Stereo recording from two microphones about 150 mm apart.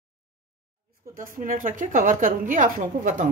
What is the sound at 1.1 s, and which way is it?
A woman's voice, 60° right (ahead or behind).